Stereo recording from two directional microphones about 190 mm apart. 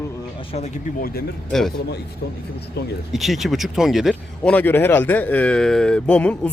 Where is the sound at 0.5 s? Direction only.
35° left (ahead or behind).